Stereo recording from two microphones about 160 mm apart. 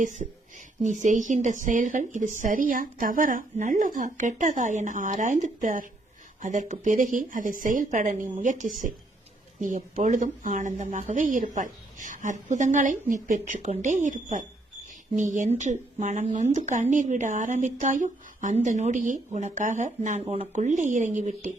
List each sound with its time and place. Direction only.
0.0 s speech: 50° right (ahead or behind)
20.2 s speech: 35° right (ahead or behind)
20.5 s speech: 50° right (ahead or behind)